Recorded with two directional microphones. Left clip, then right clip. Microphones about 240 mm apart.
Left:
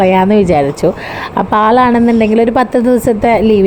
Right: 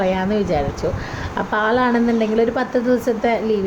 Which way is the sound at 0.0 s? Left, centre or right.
Left.